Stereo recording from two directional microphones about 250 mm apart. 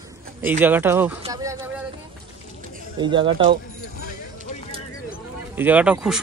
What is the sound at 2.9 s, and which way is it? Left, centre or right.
Speech, centre.